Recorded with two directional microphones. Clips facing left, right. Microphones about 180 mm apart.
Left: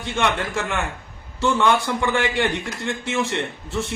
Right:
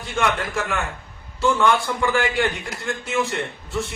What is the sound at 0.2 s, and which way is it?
A man's voice, 25° left (ahead or behind).